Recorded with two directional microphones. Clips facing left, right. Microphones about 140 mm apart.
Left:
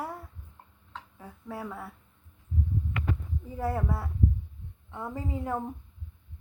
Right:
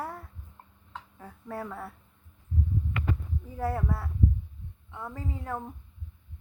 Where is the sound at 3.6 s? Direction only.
5° left (ahead or behind).